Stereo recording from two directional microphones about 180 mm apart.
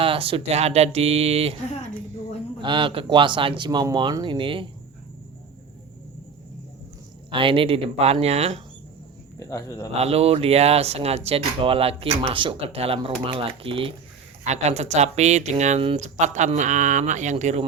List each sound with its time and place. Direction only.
0.0 s speech: 30° right (ahead or behind)
2.6 s speech: 25° right (ahead or behind)
7.3 s speech: 30° right (ahead or behind)
9.4 s a man's voice: 15° left (ahead or behind)
10.0 s speech: 35° right (ahead or behind)